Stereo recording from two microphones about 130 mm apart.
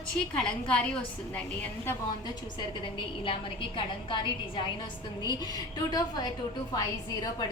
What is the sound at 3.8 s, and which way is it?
Speech, 40° left (ahead or behind).